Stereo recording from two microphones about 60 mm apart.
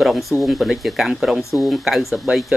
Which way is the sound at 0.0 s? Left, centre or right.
Centre.